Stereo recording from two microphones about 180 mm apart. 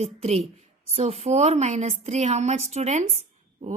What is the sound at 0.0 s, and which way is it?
Speech, 35° right (ahead or behind).